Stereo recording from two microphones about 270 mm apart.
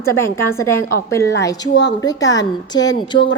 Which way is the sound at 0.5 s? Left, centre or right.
Centre.